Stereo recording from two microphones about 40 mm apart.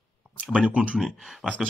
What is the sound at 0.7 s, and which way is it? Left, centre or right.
Speech, right.